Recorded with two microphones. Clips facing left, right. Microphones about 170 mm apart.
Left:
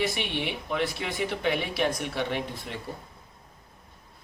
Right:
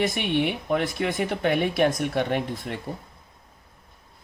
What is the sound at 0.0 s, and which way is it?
Speech, 50° right (ahead or behind).